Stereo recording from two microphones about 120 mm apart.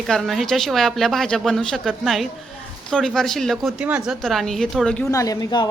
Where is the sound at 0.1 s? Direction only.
Centre (ahead or behind).